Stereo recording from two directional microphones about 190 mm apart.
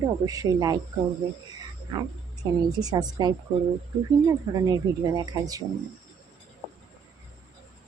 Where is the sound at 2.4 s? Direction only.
20° right (ahead or behind).